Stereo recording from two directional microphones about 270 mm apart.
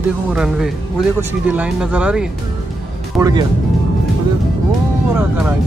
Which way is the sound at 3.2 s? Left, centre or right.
Centre.